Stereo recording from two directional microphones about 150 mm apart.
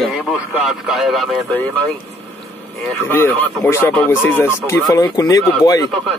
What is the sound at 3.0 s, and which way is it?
Speech, 15° left (ahead or behind).